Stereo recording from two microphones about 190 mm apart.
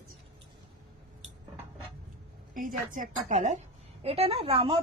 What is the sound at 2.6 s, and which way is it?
A woman's voice, 45° right (ahead or behind).